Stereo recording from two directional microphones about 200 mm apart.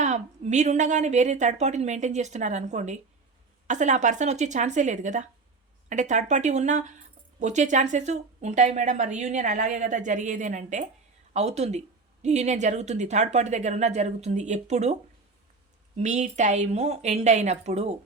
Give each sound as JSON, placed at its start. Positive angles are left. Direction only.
{"t": 0.0, "sound": "speech", "side_deg": -35}
{"t": 16.0, "sound": "speech", "side_deg": -35}